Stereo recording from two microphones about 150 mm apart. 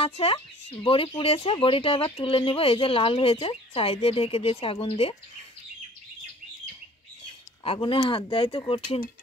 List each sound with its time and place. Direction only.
0.0 s speech: 40° left (ahead or behind)
7.6 s speech: 35° left (ahead or behind)